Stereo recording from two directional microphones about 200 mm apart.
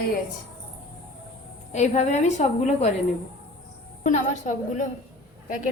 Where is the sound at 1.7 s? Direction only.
35° left (ahead or behind).